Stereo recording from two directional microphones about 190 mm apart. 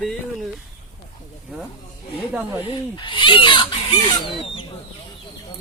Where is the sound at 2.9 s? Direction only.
25° left (ahead or behind).